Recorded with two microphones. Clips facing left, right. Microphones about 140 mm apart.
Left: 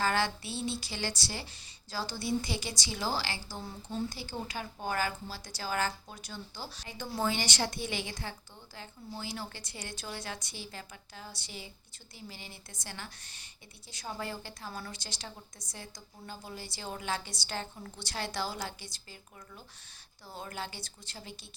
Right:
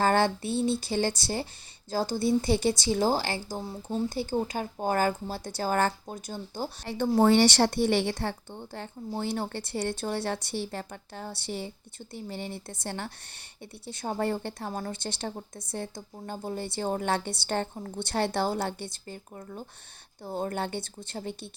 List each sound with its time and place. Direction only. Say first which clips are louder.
0.0 s speech: right 7 dB; 50° right (ahead or behind)
14.7 s speech: right 7 dB; 45° right (ahead or behind)